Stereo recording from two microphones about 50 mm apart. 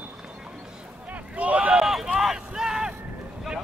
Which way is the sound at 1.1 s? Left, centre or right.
Right.